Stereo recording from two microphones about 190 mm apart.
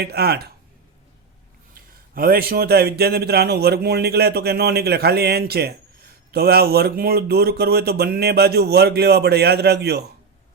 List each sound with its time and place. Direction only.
0.0 s a man's voice: 55° right (ahead or behind)
1.7 s a man's voice: 50° right (ahead or behind)